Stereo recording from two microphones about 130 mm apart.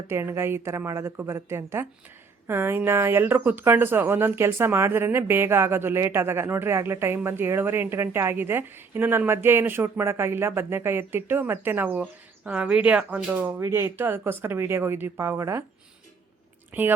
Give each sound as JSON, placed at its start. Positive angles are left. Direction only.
{"t": 0.1, "sound": "a woman's voice", "side_deg": -20}
{"t": 16.7, "sound": "speech", "side_deg": -15}